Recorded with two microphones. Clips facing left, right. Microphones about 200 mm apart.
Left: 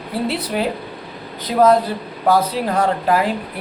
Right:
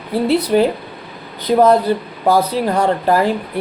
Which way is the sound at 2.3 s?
Centre (ahead or behind).